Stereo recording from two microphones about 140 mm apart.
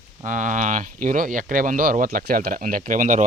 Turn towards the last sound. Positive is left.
turn(degrees=-65)  # may be behind; listen again after turning